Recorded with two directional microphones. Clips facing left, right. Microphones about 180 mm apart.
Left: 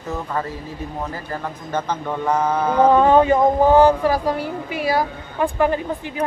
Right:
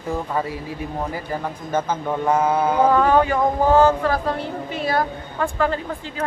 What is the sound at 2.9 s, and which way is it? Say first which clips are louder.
Speech: left 3 dB; 20° left (ahead or behind).